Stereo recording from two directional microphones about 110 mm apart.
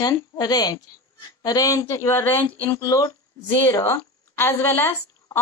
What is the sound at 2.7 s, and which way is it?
A woman's voice, 30° left (ahead or behind).